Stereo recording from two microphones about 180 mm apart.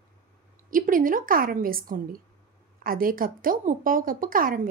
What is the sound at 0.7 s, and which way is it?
A woman's voice, 50° right (ahead or behind).